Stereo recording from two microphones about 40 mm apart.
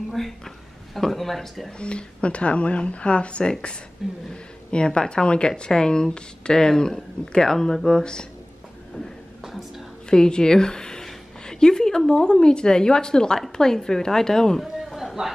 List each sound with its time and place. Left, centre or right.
0.2 s speech: centre
1.8 s speech: left
9.4 s whispering: centre
10.0 s a woman's voice: centre
11.4 s a sound: centre
12.1 s speech: centre
14.6 s a sound: centre